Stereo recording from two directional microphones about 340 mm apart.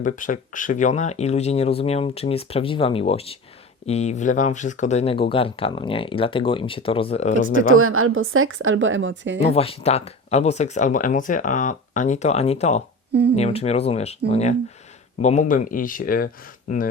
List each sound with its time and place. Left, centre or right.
0.0 s speech: left
7.3 s a woman's voice: right
9.5 s speech: centre